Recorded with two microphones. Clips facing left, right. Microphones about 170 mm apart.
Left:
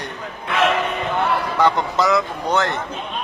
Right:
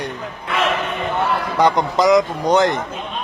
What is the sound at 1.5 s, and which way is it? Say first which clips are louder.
Speech: right 4 dB; 15° right (ahead or behind).